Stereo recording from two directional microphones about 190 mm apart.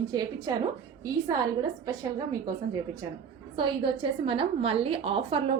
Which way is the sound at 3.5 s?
25° right (ahead or behind).